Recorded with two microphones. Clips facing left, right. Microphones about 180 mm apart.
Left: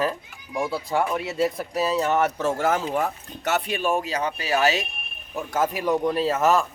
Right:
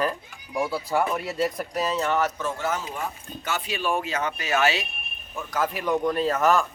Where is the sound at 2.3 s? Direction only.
40° left (ahead or behind).